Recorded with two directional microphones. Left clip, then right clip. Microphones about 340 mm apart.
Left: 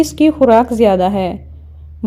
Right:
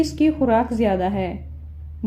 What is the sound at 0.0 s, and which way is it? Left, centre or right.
A woman's voice, left.